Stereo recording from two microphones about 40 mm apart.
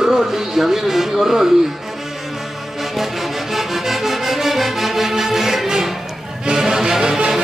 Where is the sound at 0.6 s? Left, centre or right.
Centre.